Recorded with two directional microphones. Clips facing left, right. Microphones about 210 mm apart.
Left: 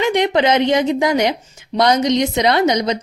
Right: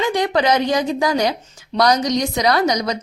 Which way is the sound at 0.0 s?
20° left (ahead or behind).